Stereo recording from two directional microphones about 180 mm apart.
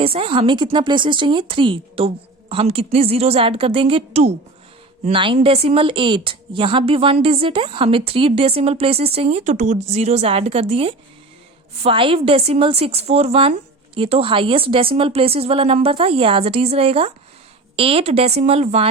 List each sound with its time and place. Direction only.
0.0 s a woman's voice: 30° right (ahead or behind)